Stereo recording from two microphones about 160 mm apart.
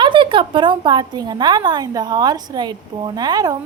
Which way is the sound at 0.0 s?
30° right (ahead or behind).